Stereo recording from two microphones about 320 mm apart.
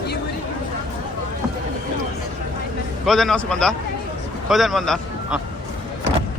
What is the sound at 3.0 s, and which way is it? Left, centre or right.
A man's voice, centre.